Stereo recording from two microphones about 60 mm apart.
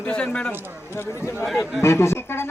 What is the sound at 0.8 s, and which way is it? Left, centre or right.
Speech, left.